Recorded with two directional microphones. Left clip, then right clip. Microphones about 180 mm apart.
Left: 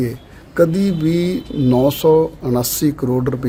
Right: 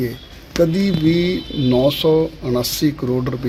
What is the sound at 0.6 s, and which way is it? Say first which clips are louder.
Speech: right 3 dB; 20° left (ahead or behind).